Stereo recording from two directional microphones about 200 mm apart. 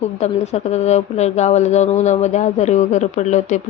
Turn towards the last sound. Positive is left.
turn(degrees=35)  # may be behind; listen again after turning